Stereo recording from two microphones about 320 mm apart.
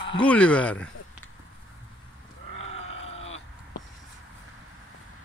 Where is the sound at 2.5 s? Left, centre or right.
Centre.